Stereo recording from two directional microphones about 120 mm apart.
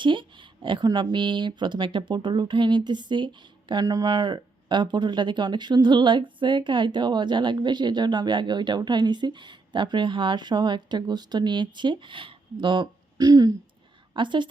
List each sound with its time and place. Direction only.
0.0 s a woman's voice: 45° right (ahead or behind)